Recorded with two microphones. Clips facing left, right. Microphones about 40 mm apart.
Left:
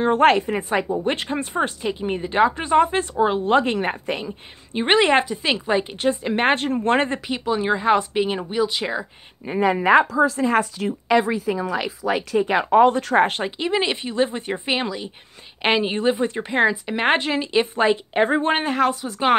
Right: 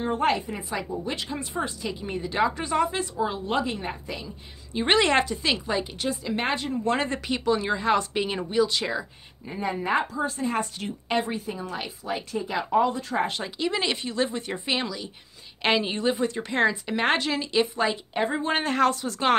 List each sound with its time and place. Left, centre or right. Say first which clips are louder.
0.0 s a woman's voice: left 8 dB; left
4.7 s speech: left 4 dB; left
7.2 s speech: left 3 dB; centre
9.5 s speech: left 10 dB; left
11.5 s speech: left 9 dB; left
13.6 s a woman's voice: left 3 dB; left
18.6 s speech: left 2 dB; centre